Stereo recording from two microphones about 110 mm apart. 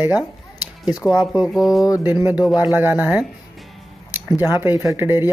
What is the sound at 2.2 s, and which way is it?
Speech, 10° right (ahead or behind).